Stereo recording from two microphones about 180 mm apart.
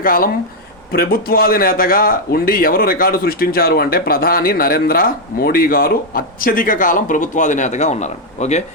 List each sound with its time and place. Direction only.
0.0 s a man's voice: 50° left (ahead or behind)